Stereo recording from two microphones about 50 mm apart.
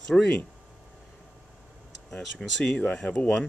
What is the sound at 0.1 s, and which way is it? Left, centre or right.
Speech, centre.